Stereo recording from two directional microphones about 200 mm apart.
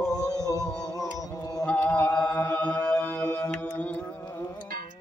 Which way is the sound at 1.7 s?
5° left (ahead or behind).